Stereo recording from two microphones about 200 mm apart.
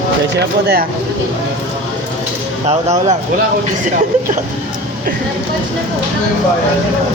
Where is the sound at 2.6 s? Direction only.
35° right (ahead or behind).